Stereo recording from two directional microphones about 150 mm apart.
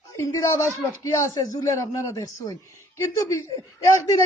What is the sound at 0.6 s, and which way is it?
Speech, 20° right (ahead or behind).